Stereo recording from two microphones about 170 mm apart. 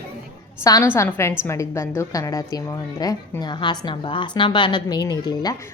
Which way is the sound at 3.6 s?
30° left (ahead or behind).